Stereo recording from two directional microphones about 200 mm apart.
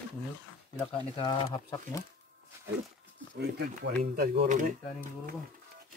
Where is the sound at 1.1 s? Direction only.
25° left (ahead or behind).